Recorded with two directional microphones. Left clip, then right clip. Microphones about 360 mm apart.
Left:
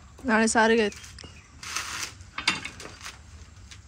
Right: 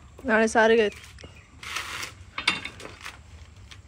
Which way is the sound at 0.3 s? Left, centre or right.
Centre.